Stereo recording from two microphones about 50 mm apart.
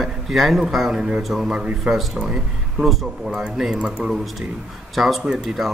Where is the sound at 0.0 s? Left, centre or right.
Centre.